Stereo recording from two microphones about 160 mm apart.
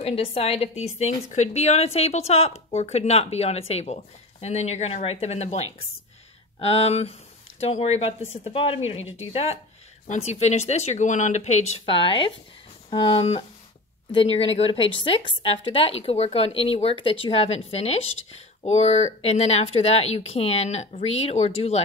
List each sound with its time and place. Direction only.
0.0 s speech: 35° left (ahead or behind)
11.8 s speech: 35° left (ahead or behind)